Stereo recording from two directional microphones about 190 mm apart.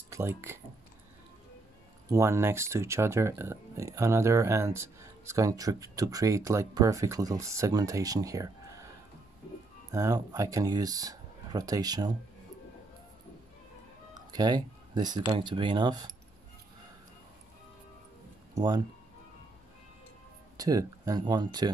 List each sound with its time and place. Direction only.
0.1 s speech: 10° right (ahead or behind)
2.0 s speech: 15° right (ahead or behind)
9.8 s speech: 20° right (ahead or behind)
14.1 s speech: 20° right (ahead or behind)
18.5 s speech: 20° right (ahead or behind)
20.5 s speech: 20° right (ahead or behind)